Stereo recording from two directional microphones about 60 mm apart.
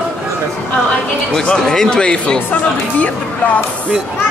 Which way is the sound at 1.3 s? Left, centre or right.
Centre.